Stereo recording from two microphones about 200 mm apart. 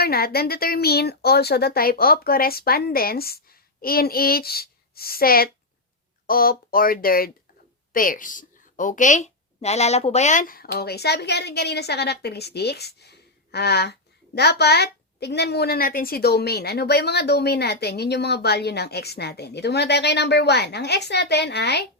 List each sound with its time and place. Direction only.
0.0 s a woman's voice: 50° left (ahead or behind)